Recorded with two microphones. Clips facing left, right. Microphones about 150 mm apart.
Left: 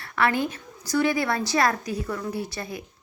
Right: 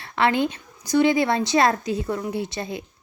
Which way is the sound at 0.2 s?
20° right (ahead or behind).